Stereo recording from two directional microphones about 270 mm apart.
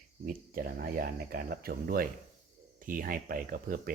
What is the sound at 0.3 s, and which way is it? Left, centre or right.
Speech, right.